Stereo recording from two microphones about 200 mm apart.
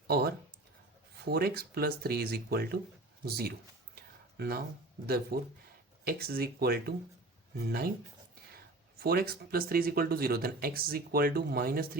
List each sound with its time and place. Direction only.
0.1 s speech: 50° right (ahead or behind)
3.9 s a sound: 50° right (ahead or behind)
5.0 s speech: 50° right (ahead or behind)
9.0 s speech: 50° right (ahead or behind)